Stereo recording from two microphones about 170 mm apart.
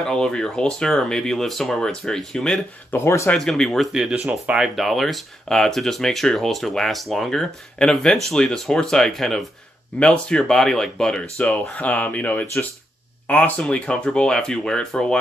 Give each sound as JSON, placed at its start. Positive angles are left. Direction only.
{"t": 0.0, "sound": "speech", "side_deg": 5}
{"t": 3.1, "sound": "speech", "side_deg": 15}
{"t": 3.3, "sound": "speech", "side_deg": 5}